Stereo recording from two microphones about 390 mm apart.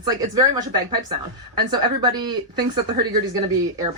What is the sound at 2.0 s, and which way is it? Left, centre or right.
Speech, centre.